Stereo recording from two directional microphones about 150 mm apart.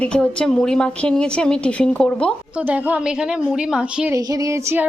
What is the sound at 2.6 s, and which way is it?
A woman's voice, 10° right (ahead or behind).